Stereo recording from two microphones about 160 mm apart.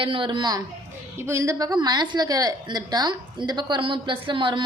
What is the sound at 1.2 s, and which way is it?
A woman's voice, 20° right (ahead or behind).